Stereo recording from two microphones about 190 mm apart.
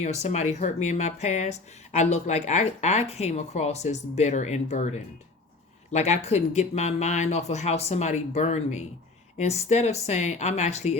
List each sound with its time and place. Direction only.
0.0 s speech: 35° left (ahead or behind)